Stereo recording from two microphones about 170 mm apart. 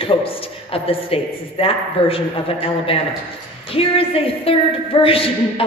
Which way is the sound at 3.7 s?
35° left (ahead or behind).